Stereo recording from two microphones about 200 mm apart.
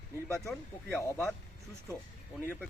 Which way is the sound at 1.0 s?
15° left (ahead or behind).